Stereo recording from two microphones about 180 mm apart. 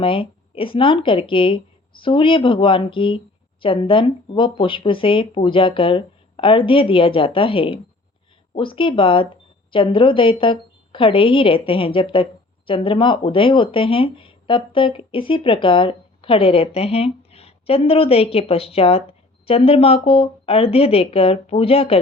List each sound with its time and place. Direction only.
0.0 s a woman's voice: 30° left (ahead or behind)